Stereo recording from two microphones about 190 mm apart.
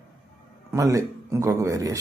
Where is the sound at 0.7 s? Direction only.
15° right (ahead or behind).